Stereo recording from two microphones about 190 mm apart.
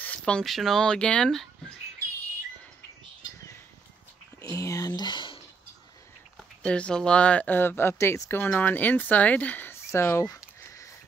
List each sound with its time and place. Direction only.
0.0 s speech: 5° left (ahead or behind)
4.4 s speech: 15° left (ahead or behind)
6.3 s speech: 5° left (ahead or behind)